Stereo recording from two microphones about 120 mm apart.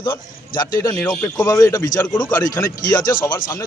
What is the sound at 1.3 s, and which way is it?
A man's voice, 30° left (ahead or behind).